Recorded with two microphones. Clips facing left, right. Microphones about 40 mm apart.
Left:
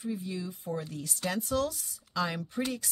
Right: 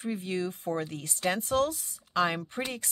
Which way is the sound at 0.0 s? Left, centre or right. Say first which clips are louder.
Right 4 dB; right.